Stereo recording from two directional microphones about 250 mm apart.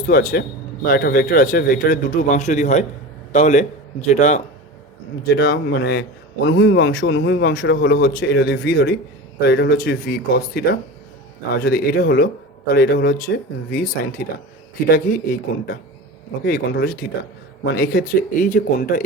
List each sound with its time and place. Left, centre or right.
0.0 s a man's voice: left